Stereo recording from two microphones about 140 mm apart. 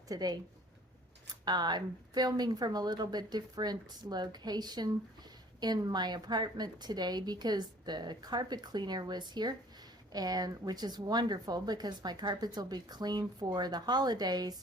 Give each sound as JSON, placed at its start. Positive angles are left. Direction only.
{"t": 0.1, "sound": "a woman's voice", "side_deg": -30}